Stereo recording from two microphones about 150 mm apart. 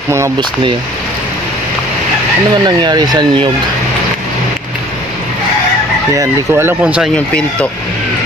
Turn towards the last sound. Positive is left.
turn(degrees=-5)  # may be behind; listen again after turning